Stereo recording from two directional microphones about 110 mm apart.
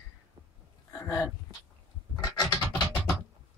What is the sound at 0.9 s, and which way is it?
Dog, 25° left (ahead or behind).